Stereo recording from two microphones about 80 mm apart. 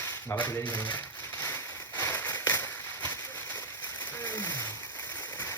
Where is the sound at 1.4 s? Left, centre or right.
Left.